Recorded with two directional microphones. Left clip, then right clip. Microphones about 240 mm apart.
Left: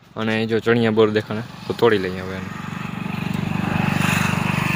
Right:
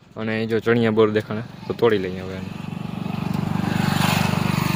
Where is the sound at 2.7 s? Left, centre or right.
Left.